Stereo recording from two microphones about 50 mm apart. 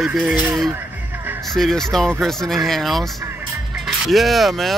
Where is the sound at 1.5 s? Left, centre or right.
Centre.